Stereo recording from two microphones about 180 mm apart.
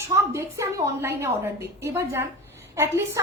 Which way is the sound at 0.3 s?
15° right (ahead or behind).